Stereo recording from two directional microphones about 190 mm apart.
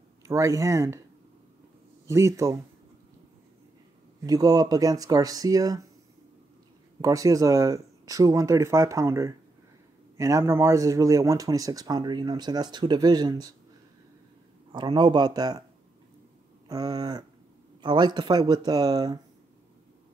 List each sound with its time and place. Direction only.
0.2 s speech: 15° right (ahead or behind)
2.0 s speech: 15° right (ahead or behind)
4.2 s speech: 20° right (ahead or behind)
7.0 s speech: 15° right (ahead or behind)
14.7 s speech: 25° right (ahead or behind)
16.6 s speech: 20° right (ahead or behind)